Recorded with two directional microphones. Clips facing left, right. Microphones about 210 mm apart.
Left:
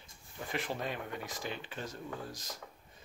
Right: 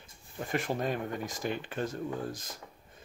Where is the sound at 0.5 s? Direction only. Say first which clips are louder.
Right 6 dB; 45° right (ahead or behind).